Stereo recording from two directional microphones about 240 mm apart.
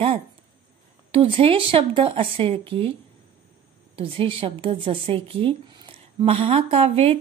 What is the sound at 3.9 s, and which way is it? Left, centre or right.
A woman's voice, right.